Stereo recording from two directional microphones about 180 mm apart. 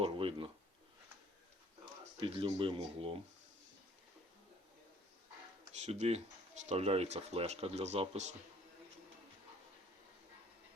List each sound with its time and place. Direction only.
0.0 s a sound: 30° right (ahead or behind)
1.8 s speech: 30° right (ahead or behind)
5.8 s speech: 35° right (ahead or behind)